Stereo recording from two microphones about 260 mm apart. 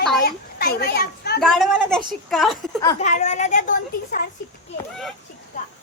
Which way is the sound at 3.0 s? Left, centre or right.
Left.